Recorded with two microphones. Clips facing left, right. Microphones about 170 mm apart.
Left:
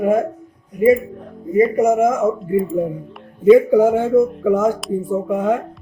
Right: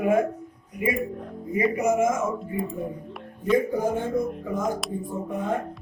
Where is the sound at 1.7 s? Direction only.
50° left (ahead or behind).